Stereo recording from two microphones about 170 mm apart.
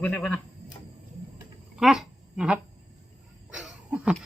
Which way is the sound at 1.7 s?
Centre (ahead or behind).